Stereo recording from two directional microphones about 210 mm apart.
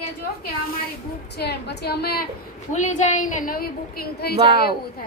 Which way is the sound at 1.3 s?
50° left (ahead or behind).